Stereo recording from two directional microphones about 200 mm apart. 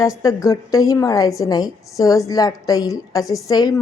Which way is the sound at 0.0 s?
15° left (ahead or behind).